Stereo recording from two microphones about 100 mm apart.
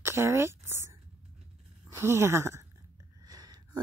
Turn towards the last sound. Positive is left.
turn(degrees=-40)  # may be behind; listen again after turning